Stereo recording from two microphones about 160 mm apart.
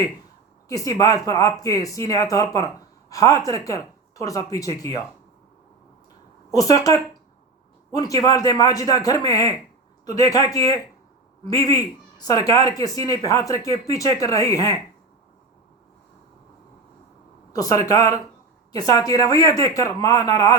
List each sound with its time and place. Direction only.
0.7 s speech: 20° left (ahead or behind)
6.5 s speech: 20° left (ahead or behind)
17.5 s speech: 20° left (ahead or behind)